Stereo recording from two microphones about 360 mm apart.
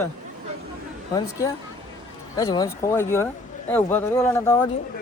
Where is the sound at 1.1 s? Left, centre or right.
Centre.